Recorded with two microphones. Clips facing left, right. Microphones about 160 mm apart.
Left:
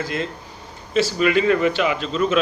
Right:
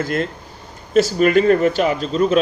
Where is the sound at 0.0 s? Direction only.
50° right (ahead or behind).